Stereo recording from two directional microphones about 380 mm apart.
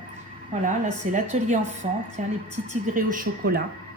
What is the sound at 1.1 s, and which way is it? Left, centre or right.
A woman's voice, centre.